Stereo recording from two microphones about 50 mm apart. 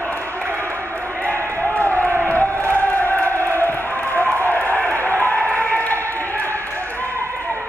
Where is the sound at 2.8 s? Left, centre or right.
Left.